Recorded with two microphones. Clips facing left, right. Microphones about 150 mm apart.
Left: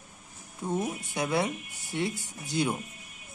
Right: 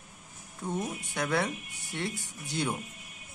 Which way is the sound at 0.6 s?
15° left (ahead or behind).